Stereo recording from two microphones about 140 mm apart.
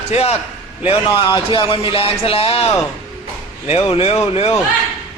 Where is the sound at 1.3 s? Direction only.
40° left (ahead or behind).